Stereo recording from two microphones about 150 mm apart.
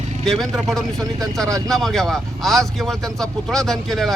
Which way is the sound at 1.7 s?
Centre (ahead or behind).